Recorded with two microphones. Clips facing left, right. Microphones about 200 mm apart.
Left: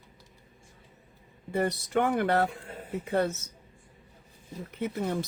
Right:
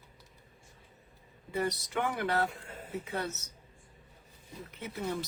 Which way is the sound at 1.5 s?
55° left (ahead or behind).